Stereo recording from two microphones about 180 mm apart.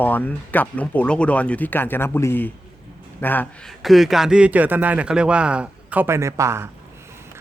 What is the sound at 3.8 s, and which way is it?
A man's voice, centre (ahead or behind).